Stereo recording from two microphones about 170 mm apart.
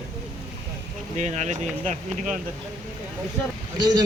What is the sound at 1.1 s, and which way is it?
Speech, 40° right (ahead or behind).